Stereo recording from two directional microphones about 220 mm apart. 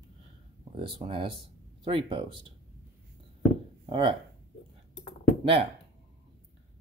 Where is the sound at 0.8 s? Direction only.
25° right (ahead or behind).